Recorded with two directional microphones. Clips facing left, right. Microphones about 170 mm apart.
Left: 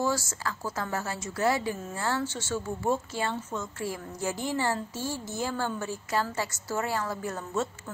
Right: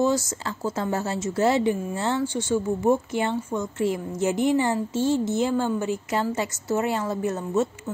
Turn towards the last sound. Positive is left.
turn(degrees=-20)  # may be behind; listen again after turning